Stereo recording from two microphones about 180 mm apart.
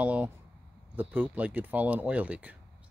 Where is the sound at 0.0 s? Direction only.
10° right (ahead or behind).